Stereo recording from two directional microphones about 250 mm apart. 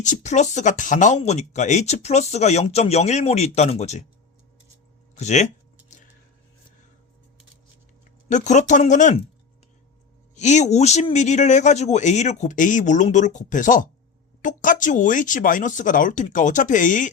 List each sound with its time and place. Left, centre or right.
0.0 s speech: left
5.1 s speech: left
8.3 s speech: left
10.3 s speech: left